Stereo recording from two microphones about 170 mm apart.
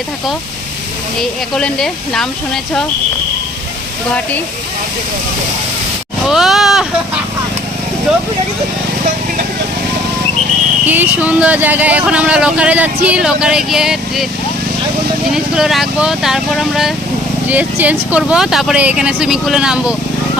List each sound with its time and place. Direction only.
1.2 s speech: 5° left (ahead or behind)
6.2 s sheep: centre (ahead or behind)
10.8 s speech: 10° right (ahead or behind)
15.3 s speech: 5° right (ahead or behind)